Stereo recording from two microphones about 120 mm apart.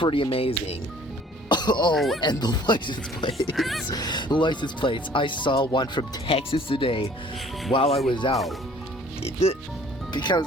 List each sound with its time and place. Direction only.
0.0 s speech: 45° left (ahead or behind)
1.5 s music: 40° left (ahead or behind)
1.9 s speech: centre (ahead or behind)
2.2 s speech: 35° left (ahead or behind)
3.3 s speech: centre (ahead or behind)
3.8 s speech: 35° left (ahead or behind); by 9.6 s 55° left (ahead or behind)
10.1 s speech: 35° left (ahead or behind)